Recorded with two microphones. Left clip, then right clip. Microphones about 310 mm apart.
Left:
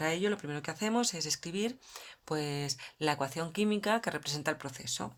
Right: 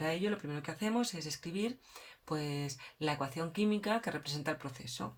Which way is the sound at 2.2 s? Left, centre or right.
Left.